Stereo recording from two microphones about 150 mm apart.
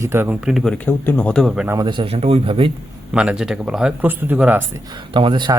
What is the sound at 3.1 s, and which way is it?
Speech, 5° right (ahead or behind).